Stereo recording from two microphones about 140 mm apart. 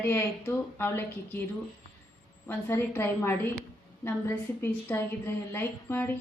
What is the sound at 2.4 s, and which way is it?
Speech, 15° left (ahead or behind).